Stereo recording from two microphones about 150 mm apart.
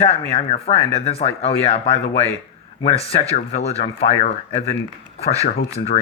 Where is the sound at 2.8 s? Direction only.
40° left (ahead or behind).